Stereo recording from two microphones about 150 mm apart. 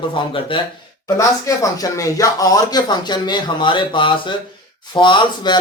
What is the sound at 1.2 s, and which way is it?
Speech, 20° left (ahead or behind).